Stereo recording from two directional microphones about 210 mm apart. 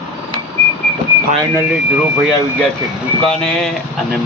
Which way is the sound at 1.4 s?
15° right (ahead or behind).